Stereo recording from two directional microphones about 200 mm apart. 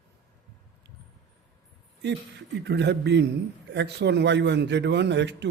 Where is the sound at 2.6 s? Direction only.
60° right (ahead or behind).